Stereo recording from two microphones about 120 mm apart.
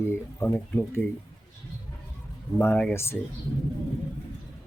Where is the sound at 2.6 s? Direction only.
15° left (ahead or behind).